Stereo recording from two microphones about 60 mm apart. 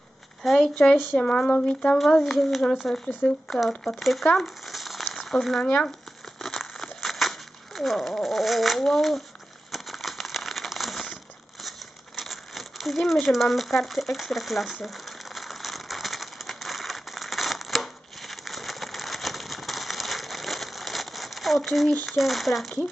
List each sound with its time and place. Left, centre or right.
0.4 s speech: centre
2.0 s speech: centre
3.2 s speech: left
3.8 s speech: centre
4.4 s crumpling: centre
5.6 s speech: centre
6.4 s a sound: centre
12.1 s crumpling: centre
22.0 s speech: centre